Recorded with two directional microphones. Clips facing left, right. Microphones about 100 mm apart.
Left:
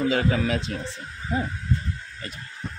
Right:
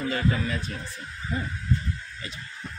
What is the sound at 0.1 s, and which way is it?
Speech, 90° left.